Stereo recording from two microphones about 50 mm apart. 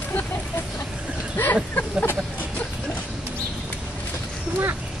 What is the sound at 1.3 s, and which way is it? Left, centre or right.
Speech, left.